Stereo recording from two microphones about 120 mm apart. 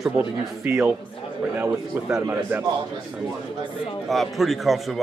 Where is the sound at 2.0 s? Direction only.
10° right (ahead or behind).